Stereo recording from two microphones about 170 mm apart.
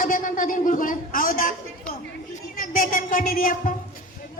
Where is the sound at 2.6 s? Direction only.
55° left (ahead or behind).